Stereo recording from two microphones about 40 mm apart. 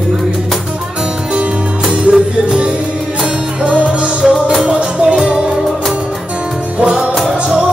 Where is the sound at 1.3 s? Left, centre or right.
Right.